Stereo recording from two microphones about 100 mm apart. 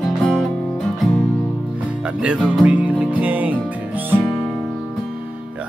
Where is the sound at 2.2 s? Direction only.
5° right (ahead or behind).